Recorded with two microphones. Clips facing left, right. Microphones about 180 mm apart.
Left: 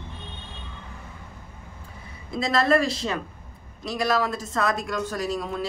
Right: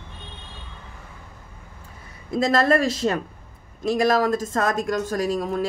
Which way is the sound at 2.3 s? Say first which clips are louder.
Right 2 dB; 45° right (ahead or behind).